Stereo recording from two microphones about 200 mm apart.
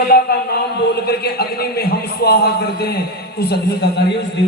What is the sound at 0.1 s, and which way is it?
A man's voice, 50° left (ahead or behind).